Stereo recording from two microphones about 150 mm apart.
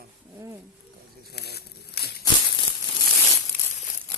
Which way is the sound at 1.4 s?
90° left.